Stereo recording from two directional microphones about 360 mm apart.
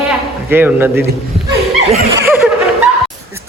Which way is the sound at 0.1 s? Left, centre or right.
Centre.